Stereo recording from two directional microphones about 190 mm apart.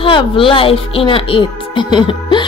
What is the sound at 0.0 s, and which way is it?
Speech, 25° left (ahead or behind).